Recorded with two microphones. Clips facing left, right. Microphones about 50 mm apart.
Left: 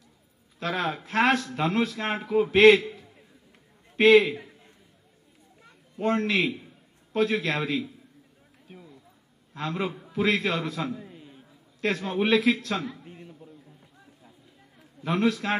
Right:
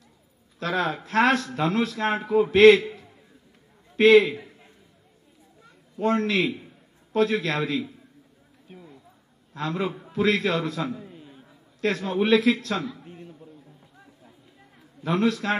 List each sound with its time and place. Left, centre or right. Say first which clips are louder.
0.6 s a man's voice: right 3 dB; left
3.9 s a man's voice: right 2 dB; centre
5.9 s a man's voice: right 2 dB; left
9.6 s a man's voice: right 2 dB; left
11.0 s a sound: right 1 dB; centre
11.8 s a man's voice: right 2 dB; centre
13.0 s a sound: right 2 dB; centre
15.0 s a man's voice: right 2 dB; left